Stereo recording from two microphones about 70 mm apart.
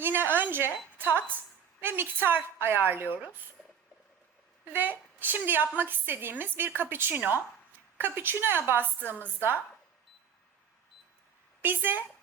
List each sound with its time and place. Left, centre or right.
0.0 s a sound: right
0.9 s a woman's voice: right
4.7 s a woman's voice: right
11.6 s speech: right